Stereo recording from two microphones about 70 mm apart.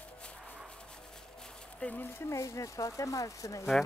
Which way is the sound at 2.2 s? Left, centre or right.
Left.